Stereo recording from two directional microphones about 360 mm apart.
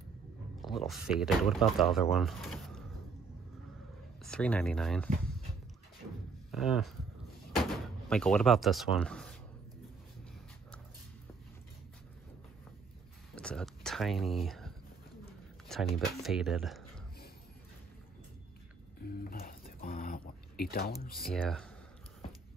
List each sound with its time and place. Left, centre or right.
0.6 s speech: centre
4.2 s speech: centre
6.5 s speech: centre
13.3 s a sound: centre
16.2 s speech: centre
19.0 s a sound: left
21.1 s speech: centre